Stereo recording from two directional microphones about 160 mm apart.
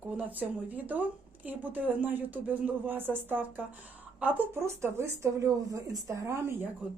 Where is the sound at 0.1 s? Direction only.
10° right (ahead or behind).